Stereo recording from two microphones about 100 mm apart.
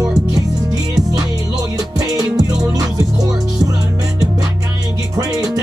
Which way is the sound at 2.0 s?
35° right (ahead or behind).